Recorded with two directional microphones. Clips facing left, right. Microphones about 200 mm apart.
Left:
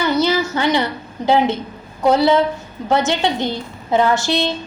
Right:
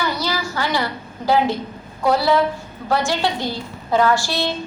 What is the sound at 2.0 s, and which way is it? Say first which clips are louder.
A woman's voice: left 3 dB; 20° left (ahead or behind).